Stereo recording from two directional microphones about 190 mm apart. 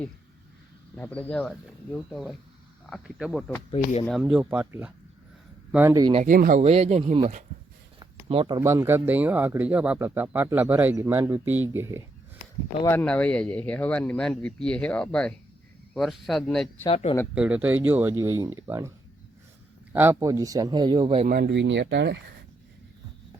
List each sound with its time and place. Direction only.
0.9 s speech: 10° left (ahead or behind); by 6.1 s 15° right (ahead or behind)
6.2 s speech: 45° right (ahead or behind)
6.6 s speech: 35° right (ahead or behind)
8.3 s speech: 25° right (ahead or behind)
12.8 s speech: 10° left (ahead or behind)
16.8 s speech: 30° left (ahead or behind)
17.3 s speech: 5° right (ahead or behind); by 21.2 s 25° right (ahead or behind)
21.2 s speech: 55° right (ahead or behind)